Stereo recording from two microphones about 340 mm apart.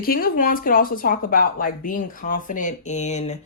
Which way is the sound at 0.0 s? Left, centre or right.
Left.